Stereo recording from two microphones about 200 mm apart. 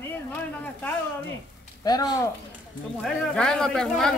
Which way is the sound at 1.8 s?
20° left (ahead or behind).